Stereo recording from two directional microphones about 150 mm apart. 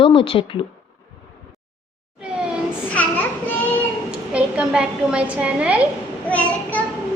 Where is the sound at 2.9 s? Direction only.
10° left (ahead or behind).